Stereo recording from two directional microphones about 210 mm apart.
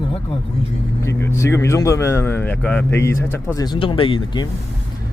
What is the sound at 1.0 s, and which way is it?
A man's voice, 10° left (ahead or behind).